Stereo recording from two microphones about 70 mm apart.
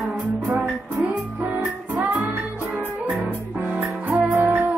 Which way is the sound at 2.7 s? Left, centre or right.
Right.